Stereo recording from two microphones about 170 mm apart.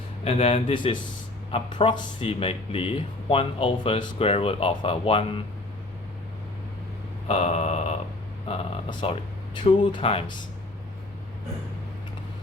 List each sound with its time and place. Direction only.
0.3 s speech: 35° left (ahead or behind)
7.3 s speech: 40° left (ahead or behind)